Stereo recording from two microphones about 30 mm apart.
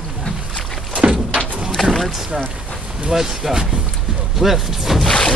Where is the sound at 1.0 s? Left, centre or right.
Right.